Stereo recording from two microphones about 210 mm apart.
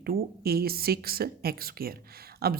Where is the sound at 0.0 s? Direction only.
45° right (ahead or behind).